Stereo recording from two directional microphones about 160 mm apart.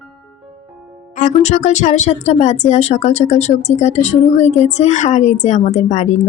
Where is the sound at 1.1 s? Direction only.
45° left (ahead or behind).